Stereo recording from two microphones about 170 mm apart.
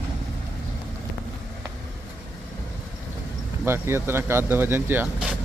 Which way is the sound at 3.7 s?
15° right (ahead or behind).